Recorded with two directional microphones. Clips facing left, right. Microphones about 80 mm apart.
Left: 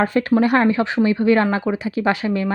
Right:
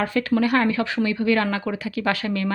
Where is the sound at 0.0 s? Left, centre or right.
Left.